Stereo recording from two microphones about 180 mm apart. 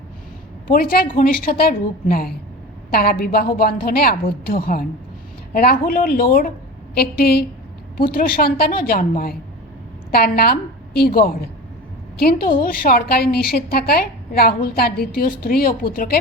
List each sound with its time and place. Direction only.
0.7 s a woman's voice: 55° left (ahead or behind)